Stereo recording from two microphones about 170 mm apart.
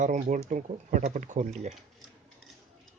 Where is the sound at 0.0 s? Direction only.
45° right (ahead or behind).